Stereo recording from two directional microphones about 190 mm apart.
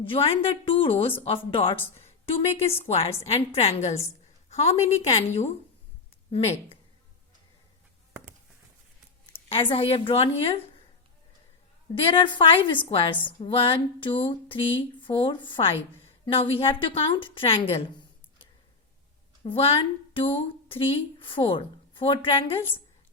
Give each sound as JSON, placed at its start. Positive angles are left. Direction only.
{"t": 0.0, "sound": "a woman's voice", "side_deg": 30}
{"t": 9.2, "sound": "speech", "side_deg": 25}
{"t": 12.0, "sound": "speech", "side_deg": 25}
{"t": 19.5, "sound": "speech", "side_deg": 30}